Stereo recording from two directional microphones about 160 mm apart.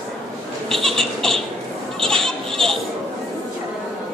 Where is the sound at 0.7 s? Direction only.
Centre (ahead or behind).